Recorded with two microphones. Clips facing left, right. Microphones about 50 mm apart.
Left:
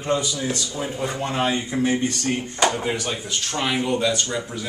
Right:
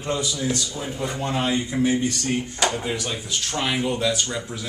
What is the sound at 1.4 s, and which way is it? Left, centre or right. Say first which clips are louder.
A man's voice: even; left.